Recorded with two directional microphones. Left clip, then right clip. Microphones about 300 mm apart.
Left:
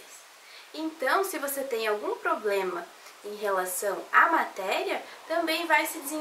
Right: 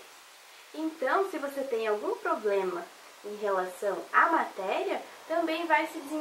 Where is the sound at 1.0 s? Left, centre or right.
Centre.